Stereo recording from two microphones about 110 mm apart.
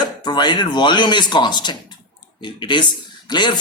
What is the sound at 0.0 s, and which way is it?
A man's voice, 40° left (ahead or behind).